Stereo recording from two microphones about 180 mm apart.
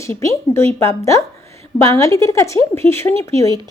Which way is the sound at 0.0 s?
15° left (ahead or behind).